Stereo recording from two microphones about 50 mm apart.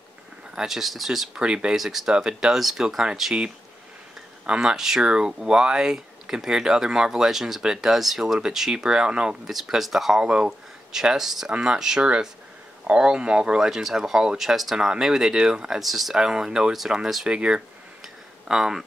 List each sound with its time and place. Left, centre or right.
0.6 s speech: centre
1.3 s speech: centre
1.8 s speech: centre
4.5 s speech: centre
9.5 s speech: centre
10.2 s speech: centre
18.0 s a sound: centre